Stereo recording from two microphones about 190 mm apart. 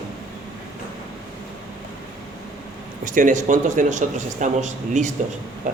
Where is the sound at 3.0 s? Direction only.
45° right (ahead or behind).